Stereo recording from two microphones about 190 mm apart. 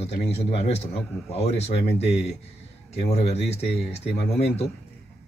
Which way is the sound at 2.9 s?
35° left (ahead or behind).